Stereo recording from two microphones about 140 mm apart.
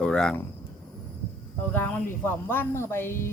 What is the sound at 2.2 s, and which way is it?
Speech, 15° left (ahead or behind).